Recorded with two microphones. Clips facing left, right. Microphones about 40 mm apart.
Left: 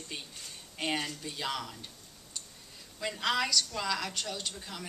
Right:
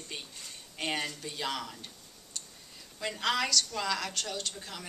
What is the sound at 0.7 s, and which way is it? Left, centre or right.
A woman's voice, centre.